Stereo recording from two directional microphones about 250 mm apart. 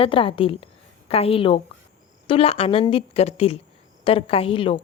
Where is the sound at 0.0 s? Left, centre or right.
Left.